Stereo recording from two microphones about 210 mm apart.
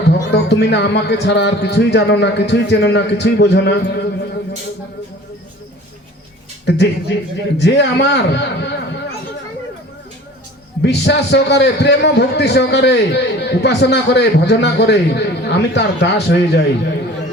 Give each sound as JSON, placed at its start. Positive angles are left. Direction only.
{"t": 0.3, "sound": "a man's voice", "side_deg": 55}
{"t": 6.7, "sound": "a man's voice", "side_deg": 55}
{"t": 10.8, "sound": "a man's voice", "side_deg": 55}